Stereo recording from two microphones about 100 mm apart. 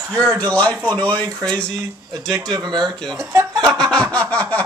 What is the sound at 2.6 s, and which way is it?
Speech, 45° right (ahead or behind).